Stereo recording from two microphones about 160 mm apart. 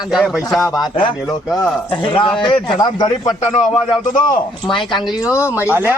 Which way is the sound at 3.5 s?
45° left (ahead or behind).